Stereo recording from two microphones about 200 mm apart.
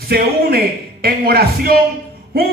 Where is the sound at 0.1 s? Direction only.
50° right (ahead or behind).